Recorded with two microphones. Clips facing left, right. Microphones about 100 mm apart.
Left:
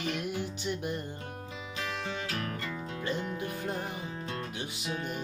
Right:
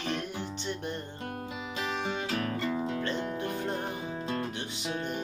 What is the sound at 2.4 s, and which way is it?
Music, 30° right (ahead or behind).